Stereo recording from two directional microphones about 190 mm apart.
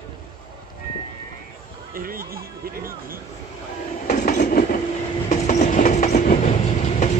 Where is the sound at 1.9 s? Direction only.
50° right (ahead or behind).